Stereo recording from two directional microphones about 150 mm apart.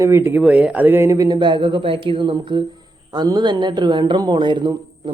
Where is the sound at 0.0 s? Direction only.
15° right (ahead or behind).